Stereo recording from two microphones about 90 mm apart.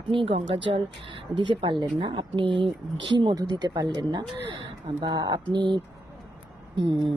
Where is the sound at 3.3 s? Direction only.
50° right (ahead or behind).